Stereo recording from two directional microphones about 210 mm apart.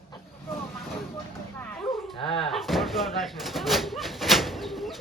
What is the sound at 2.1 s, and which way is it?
Dog, 25° left (ahead or behind).